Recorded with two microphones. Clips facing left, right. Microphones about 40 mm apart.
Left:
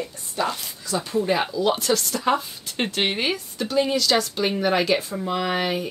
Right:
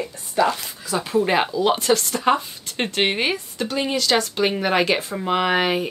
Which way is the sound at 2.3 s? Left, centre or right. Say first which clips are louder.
Even; centre.